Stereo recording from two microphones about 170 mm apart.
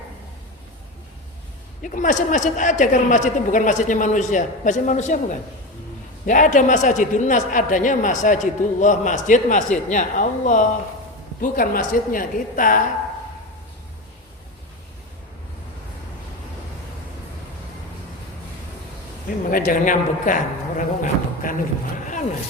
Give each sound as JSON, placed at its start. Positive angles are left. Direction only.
{"t": 1.8, "sound": "a man's voice", "side_deg": 45}
{"t": 19.5, "sound": "speech", "side_deg": 55}